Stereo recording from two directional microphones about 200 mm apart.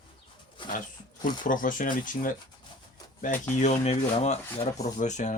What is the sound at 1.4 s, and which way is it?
Speech, 40° left (ahead or behind).